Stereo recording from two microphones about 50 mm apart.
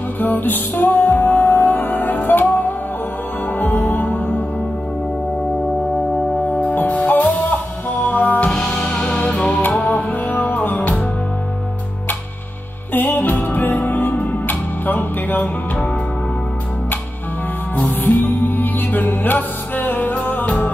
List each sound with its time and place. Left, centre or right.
0.2 s music: left
6.6 s music: left
8.5 s music: centre; by 11.0 s left
12.9 s music: left
18.0 s music: left